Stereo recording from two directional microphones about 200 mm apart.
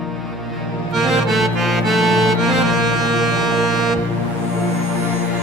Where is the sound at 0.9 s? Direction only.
Centre (ahead or behind).